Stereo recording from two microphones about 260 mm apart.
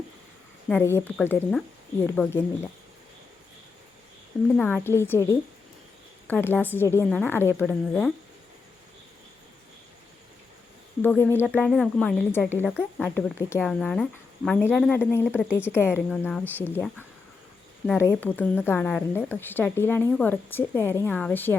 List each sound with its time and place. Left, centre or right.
0.7 s a woman's voice: centre
4.5 s a woman's voice: centre
11.0 s a woman's voice: centre
15.9 s speech: centre
16.6 s a woman's voice: centre